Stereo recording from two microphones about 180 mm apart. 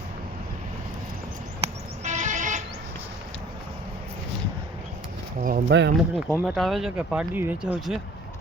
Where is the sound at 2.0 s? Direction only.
40° right (ahead or behind).